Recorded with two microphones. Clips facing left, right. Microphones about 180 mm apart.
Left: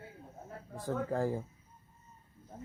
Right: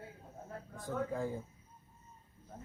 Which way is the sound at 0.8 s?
85° left.